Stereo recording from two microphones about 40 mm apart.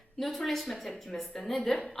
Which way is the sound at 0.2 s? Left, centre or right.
Centre.